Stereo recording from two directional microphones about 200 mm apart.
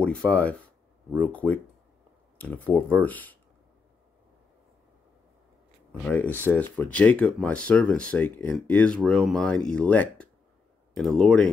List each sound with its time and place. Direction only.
0.0 s speech: 5° left (ahead or behind)
5.9 s speech: 5° left (ahead or behind)